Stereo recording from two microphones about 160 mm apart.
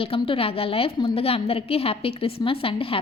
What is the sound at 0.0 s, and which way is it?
Speech, 35° left (ahead or behind).